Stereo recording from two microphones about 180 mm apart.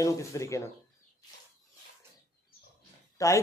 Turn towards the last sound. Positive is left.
turn(degrees=15)  # may be behind; listen again after turning